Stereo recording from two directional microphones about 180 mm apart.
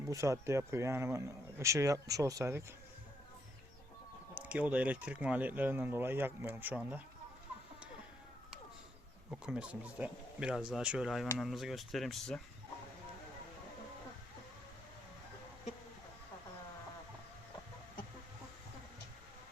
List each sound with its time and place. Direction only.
0.0 s speech: 15° right (ahead or behind)
4.4 s speech: 10° right (ahead or behind)
9.3 s speech: 5° right (ahead or behind)